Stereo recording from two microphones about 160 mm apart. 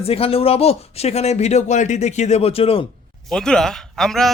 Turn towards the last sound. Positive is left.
turn(degrees=0)  # may be behind; listen again after turning